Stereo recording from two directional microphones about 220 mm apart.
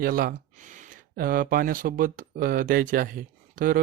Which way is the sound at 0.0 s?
40° right (ahead or behind).